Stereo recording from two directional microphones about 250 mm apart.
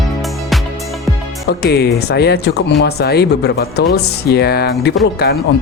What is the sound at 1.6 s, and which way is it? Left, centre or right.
Speech, left.